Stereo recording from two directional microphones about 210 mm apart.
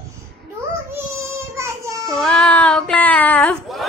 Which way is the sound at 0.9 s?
10° right (ahead or behind).